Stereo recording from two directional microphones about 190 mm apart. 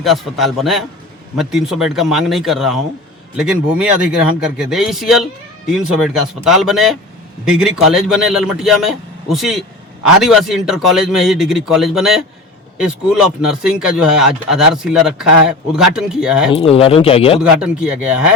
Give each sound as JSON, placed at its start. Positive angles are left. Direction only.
{"t": 0.0, "sound": "speech", "side_deg": 0}
{"t": 16.5, "sound": "speech", "side_deg": 30}
{"t": 17.4, "sound": "speech", "side_deg": -5}